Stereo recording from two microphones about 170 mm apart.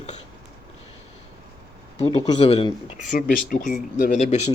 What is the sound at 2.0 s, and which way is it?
Speech, 30° left (ahead or behind).